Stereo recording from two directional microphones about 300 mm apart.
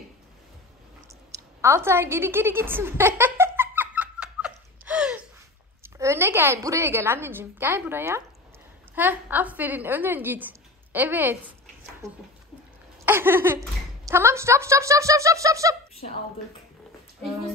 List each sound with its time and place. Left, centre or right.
1.6 s a sound: centre
5.8 s speech: centre
13.0 s speech: centre